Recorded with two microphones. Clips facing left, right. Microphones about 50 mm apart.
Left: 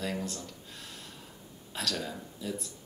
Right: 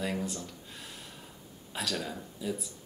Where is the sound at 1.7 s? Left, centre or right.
Centre.